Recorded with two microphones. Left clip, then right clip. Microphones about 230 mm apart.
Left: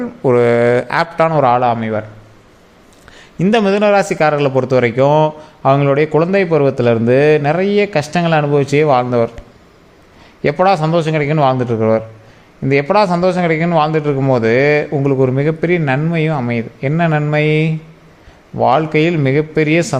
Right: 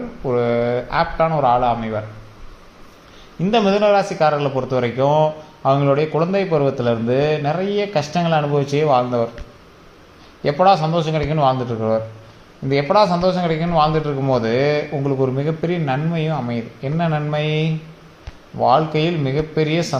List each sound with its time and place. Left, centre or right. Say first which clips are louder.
0.3 s a man's voice: left 7 dB; left
3.3 s a man's voice: left 3 dB; left
10.4 s a man's voice: left 2 dB; left